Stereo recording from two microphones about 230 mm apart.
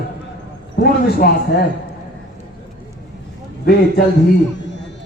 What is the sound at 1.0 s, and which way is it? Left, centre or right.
Speech, left.